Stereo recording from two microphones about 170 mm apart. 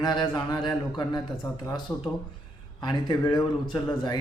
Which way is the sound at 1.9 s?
10° left (ahead or behind).